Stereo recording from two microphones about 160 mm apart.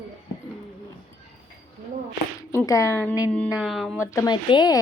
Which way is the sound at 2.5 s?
20° left (ahead or behind).